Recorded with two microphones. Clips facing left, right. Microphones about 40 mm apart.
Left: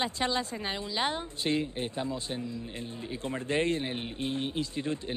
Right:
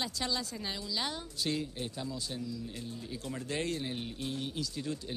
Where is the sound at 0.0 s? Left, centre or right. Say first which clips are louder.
Left 5 dB; left.